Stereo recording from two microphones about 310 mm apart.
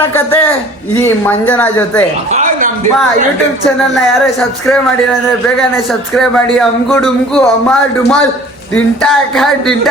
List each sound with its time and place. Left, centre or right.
0.0 s a man's voice: centre
2.3 s a sound: right
4.6 s speech: centre